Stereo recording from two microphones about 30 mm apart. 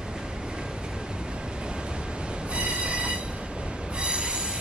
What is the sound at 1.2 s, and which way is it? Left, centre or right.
Train, right.